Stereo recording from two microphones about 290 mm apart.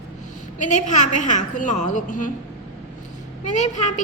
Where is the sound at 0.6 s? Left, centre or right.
Left.